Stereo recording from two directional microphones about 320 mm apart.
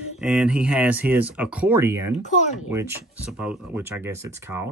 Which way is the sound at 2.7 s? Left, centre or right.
Centre.